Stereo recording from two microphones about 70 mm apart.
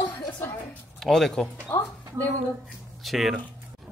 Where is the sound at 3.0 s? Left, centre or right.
Centre.